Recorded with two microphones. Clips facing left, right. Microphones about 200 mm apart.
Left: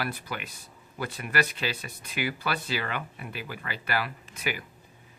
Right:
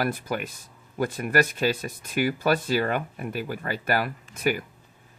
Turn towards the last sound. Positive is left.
turn(degrees=-45)  # may be behind; listen again after turning